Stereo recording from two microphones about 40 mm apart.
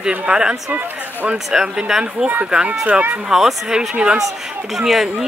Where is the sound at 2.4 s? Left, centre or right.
Right.